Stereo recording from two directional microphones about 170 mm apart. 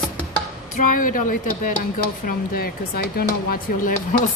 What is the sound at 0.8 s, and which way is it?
Speech, 50° left (ahead or behind).